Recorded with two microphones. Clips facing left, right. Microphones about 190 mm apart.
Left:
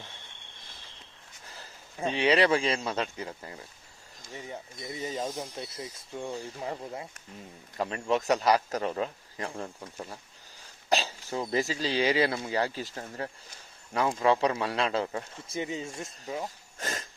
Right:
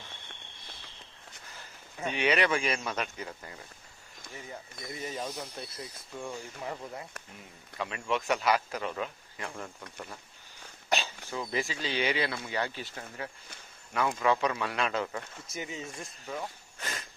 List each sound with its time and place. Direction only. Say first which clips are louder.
1.5 s speech: left 4 dB; 30° left (ahead or behind)
7.8 s speech: left 4 dB; 35° left (ahead or behind)
10.8 s speech: left 3 dB; 35° left (ahead or behind)
16.8 s a sound: left 4 dB; 40° left (ahead or behind)